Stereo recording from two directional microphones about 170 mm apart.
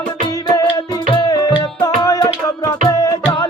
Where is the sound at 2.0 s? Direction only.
20° left (ahead or behind).